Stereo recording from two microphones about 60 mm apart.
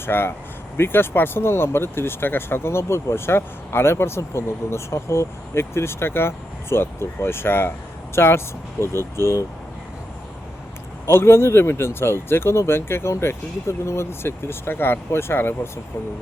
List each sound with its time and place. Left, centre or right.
0.0 s speech: left
11.0 s speech: left